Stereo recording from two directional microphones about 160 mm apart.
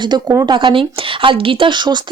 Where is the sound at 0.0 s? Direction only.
25° right (ahead or behind).